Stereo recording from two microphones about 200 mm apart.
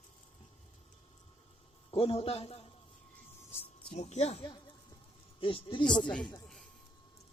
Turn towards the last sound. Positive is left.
turn(degrees=5)  # may be behind; listen again after turning